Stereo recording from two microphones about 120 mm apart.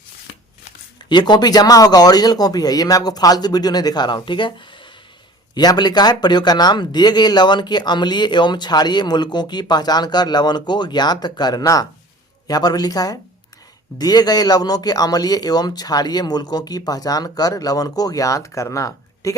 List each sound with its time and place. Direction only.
1.1 s speech: 35° left (ahead or behind)